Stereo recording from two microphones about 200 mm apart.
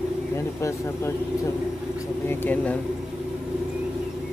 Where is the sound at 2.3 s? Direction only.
10° left (ahead or behind).